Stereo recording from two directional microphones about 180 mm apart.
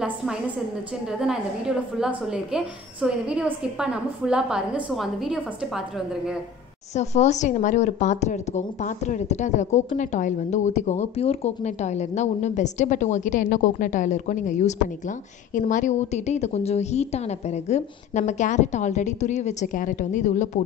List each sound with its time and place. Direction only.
0.0 s a woman's voice: 5° right (ahead or behind)
6.9 s speech: 40° left (ahead or behind)